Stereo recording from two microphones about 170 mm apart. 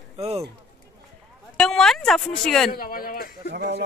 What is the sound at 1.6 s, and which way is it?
Speech, 5° left (ahead or behind).